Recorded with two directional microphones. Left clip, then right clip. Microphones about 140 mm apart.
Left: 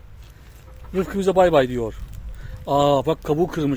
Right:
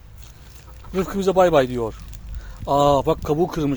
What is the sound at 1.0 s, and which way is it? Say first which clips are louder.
Speech: even; 5° left (ahead or behind).